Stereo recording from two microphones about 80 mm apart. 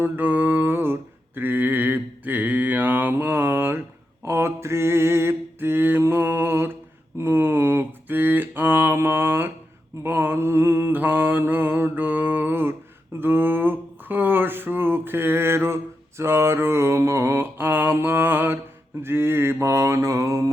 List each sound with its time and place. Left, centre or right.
0.0 s mantra: right
10.0 s a sound: right
19.0 s mantra: right